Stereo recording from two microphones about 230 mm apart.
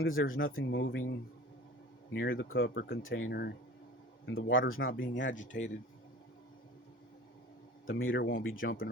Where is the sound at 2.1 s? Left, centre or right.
Left.